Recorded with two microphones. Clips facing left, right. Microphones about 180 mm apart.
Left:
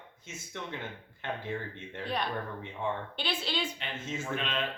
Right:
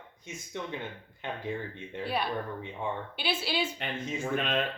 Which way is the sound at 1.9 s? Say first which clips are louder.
Right 2 dB; 5° right (ahead or behind).